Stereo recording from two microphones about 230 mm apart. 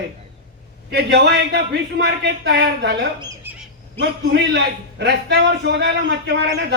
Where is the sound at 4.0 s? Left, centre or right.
Right.